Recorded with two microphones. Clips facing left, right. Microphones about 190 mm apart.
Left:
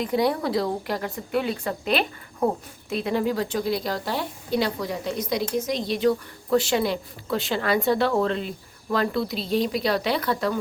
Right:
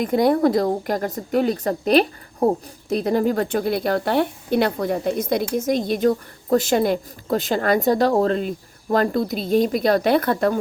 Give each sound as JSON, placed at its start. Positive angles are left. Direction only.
{"t": 0.0, "sound": "a woman's voice", "side_deg": -50}